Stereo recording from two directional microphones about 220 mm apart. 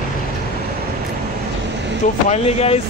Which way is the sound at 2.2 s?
30° left (ahead or behind).